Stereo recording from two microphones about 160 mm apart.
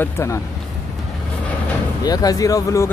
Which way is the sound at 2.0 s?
25° left (ahead or behind).